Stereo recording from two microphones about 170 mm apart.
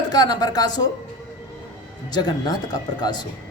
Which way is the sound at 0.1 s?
25° left (ahead or behind).